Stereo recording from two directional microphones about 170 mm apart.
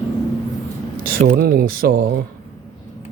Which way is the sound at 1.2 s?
60° right (ahead or behind).